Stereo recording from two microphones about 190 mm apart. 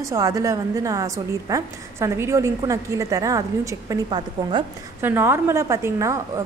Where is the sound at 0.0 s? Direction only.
15° right (ahead or behind).